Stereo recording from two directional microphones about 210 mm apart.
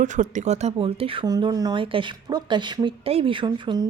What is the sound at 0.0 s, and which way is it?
Speech, 35° right (ahead or behind).